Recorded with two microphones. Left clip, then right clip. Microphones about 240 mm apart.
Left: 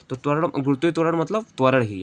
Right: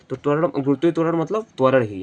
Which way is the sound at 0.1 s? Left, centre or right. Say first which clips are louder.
Right 2 dB; left.